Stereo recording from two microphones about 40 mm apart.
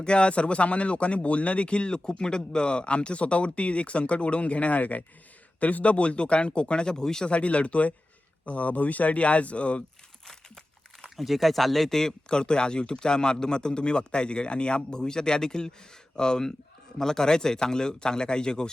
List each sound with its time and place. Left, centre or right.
0.0 s speech: left
7.3 s speech: left
11.2 s speech: centre
12.3 s speech: left